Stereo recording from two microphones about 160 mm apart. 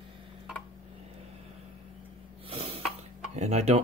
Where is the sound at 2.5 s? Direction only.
35° right (ahead or behind).